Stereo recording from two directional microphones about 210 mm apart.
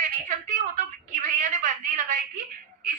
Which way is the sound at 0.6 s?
40° right (ahead or behind).